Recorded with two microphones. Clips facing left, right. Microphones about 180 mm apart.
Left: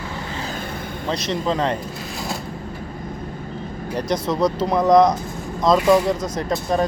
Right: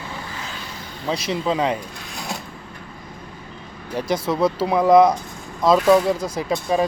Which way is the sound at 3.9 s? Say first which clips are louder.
Even; 5° right (ahead or behind).